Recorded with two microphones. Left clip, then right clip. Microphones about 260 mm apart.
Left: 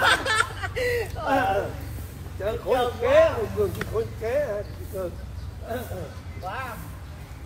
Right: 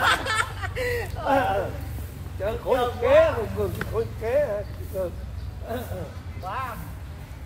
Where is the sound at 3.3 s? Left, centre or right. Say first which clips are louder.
Left 1 dB; centre.